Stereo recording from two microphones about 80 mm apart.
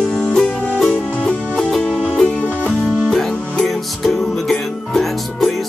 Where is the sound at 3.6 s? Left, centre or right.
Centre.